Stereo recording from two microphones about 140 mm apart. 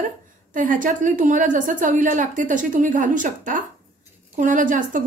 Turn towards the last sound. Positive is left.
turn(degrees=-70)  # may be behind; listen again after turning